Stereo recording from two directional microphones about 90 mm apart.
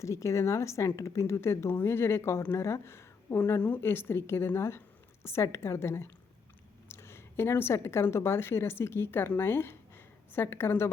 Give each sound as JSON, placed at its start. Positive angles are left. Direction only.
{"t": 0.0, "sound": "a woman's voice", "side_deg": 35}